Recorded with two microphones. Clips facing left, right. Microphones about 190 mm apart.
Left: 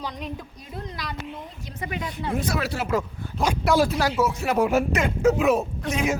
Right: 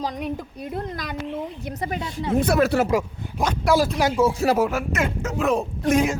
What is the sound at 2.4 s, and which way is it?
Speech, 55° right (ahead or behind).